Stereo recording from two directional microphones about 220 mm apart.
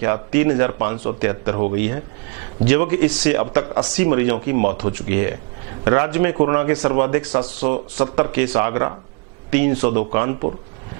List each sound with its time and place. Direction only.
0.0 s speech: 15° right (ahead or behind)
3.4 s speech: 20° right (ahead or behind)
3.8 s speech: 10° right (ahead or behind)